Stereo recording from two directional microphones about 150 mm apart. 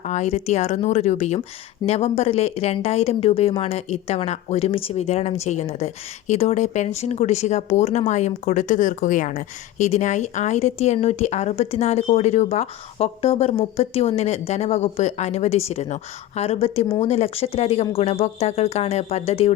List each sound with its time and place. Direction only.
0.0 s a woman's voice: 50° left (ahead or behind)